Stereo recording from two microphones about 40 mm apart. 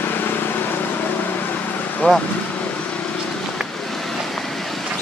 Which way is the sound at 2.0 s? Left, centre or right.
Left.